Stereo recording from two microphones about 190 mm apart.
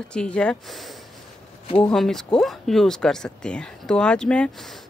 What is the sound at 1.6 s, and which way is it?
Speech, 30° left (ahead or behind).